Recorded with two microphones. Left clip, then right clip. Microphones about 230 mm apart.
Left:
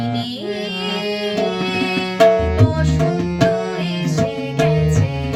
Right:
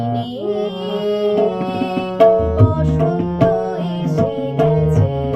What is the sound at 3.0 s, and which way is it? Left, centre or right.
Tabla, left.